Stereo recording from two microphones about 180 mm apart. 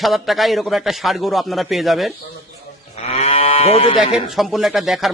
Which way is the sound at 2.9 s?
35° left (ahead or behind).